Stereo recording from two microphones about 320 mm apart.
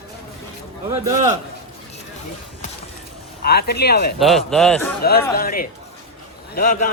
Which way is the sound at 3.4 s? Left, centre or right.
Left.